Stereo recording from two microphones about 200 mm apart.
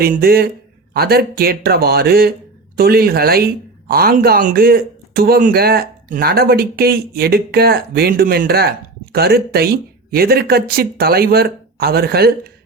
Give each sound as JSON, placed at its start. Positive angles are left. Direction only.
{"t": 0.0, "sound": "speech", "side_deg": -45}